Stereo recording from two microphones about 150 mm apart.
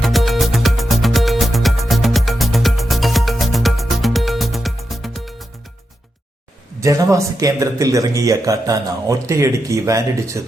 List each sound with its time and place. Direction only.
0.0 s music: centre (ahead or behind)
6.7 s speech: 20° right (ahead or behind)